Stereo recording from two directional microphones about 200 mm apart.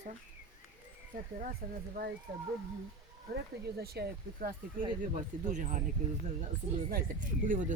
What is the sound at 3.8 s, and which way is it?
Speech, 50° right (ahead or behind).